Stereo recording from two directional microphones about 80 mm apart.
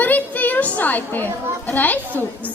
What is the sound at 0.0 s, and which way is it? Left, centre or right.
Chatter, left.